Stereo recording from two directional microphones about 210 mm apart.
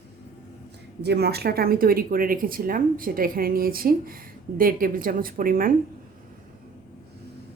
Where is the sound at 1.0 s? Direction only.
50° right (ahead or behind).